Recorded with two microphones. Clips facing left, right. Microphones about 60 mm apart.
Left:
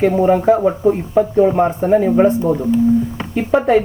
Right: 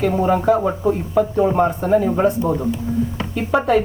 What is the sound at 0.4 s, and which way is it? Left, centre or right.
Speech, left.